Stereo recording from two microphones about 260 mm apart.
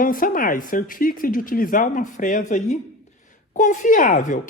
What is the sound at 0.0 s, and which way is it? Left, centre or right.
Speech, left.